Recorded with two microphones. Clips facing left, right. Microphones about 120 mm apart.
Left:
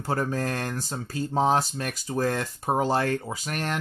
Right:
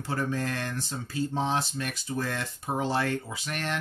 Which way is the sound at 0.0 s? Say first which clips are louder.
Left 3 dB; 40° left (ahead or behind).